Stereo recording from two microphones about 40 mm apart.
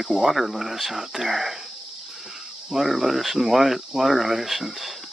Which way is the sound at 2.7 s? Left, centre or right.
Centre.